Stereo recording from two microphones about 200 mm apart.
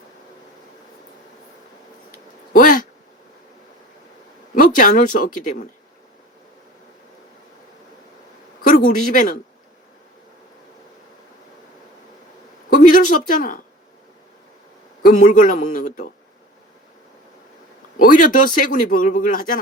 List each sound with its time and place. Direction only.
2.5 s a sound: 45° left (ahead or behind)
4.5 s speech: 40° left (ahead or behind)
8.6 s a sound: 45° left (ahead or behind)
9.1 s speech: 40° left (ahead or behind)
12.7 s a man's voice: 40° left (ahead or behind)
15.0 s speech: 40° left (ahead or behind)
18.0 s a man's voice: 40° left (ahead or behind)